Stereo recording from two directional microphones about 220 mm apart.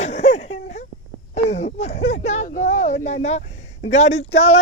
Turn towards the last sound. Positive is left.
turn(degrees=30)  # may be behind; listen again after turning